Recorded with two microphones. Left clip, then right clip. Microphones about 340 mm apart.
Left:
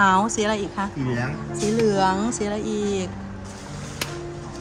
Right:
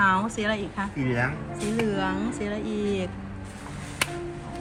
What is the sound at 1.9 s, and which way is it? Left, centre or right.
A woman's voice, centre.